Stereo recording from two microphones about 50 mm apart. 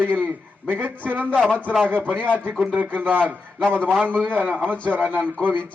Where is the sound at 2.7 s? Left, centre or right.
Right.